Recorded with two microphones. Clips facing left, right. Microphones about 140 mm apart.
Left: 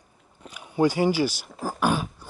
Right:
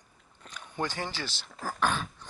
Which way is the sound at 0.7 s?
10° left (ahead or behind).